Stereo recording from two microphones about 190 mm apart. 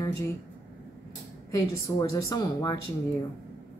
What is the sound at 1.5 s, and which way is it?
Speech, 15° left (ahead or behind).